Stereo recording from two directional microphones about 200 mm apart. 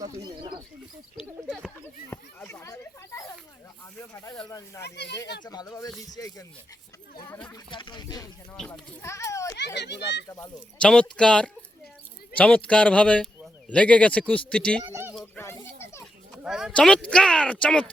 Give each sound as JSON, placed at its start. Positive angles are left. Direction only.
{"t": 0.0, "sound": "speech", "side_deg": -20}
{"t": 1.2, "sound": "speech", "side_deg": -5}
{"t": 2.0, "sound": "a man's voice", "side_deg": 15}
{"t": 4.8, "sound": "a child's voice", "side_deg": 55}
{"t": 5.5, "sound": "a man's voice", "side_deg": 15}
{"t": 8.5, "sound": "a child's voice", "side_deg": 5}
{"t": 9.6, "sound": "a child's voice", "side_deg": 60}
{"t": 10.2, "sound": "a man's voice", "side_deg": 15}
{"t": 10.8, "sound": "a man's voice", "side_deg": 5}
{"t": 14.8, "sound": "speech", "side_deg": -10}
{"t": 15.2, "sound": "children playing", "side_deg": 15}
{"t": 16.3, "sound": "speech", "side_deg": -5}